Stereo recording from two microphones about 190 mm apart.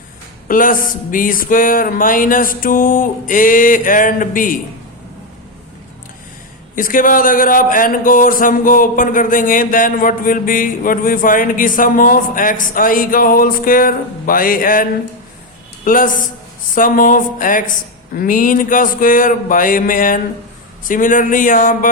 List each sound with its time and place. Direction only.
0.4 s speech: 45° left (ahead or behind)
6.7 s speech: 45° left (ahead or behind)